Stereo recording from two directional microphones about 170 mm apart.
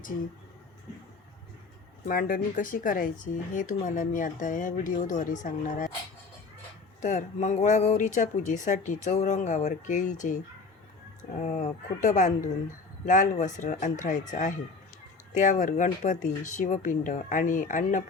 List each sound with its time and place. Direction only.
2.0 s speech: 55° left (ahead or behind)
7.0 s speech: 45° left (ahead or behind)